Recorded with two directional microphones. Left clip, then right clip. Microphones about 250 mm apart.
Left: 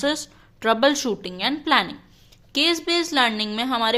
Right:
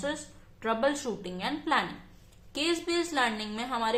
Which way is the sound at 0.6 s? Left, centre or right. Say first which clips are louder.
Left 9 dB; left.